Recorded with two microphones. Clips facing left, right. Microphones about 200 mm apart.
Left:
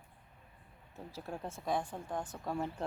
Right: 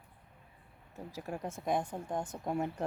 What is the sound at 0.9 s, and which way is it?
Speech, 15° right (ahead or behind).